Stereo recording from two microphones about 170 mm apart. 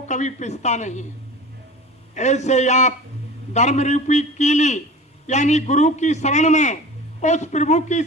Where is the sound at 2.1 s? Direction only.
45° left (ahead or behind).